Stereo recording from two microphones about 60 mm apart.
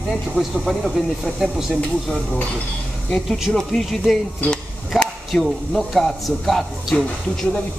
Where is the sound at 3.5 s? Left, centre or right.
Centre.